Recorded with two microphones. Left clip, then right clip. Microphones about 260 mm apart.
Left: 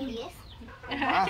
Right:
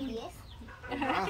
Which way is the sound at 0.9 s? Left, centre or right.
Centre.